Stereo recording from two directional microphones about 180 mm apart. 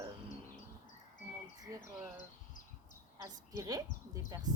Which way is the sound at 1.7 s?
20° right (ahead or behind).